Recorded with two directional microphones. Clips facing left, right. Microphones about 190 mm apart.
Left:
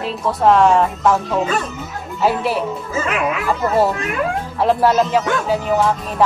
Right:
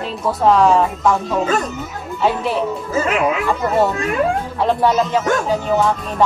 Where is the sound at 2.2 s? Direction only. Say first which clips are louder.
Even; 5° left (ahead or behind).